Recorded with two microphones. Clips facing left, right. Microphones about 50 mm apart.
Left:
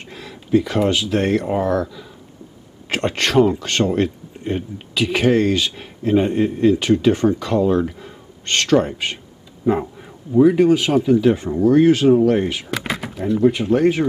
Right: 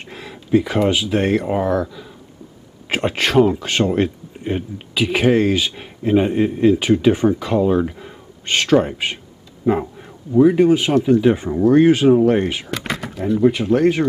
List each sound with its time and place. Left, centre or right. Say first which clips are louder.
0.0 s speech: right 1 dB; centre
11.1 s speech: right 1 dB; centre
13.2 s speech: right 1 dB; centre